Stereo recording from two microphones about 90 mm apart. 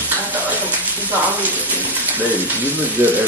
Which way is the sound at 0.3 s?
20° right (ahead or behind).